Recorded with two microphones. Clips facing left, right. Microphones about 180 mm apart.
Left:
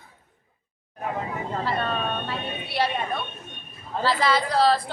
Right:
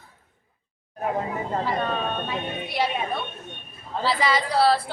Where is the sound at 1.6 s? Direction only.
15° right (ahead or behind).